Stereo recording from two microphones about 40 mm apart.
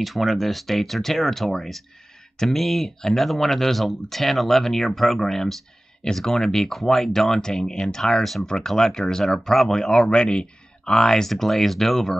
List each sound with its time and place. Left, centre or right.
0.0 s speech: centre
8.2 s speech: centre
8.5 s speech: centre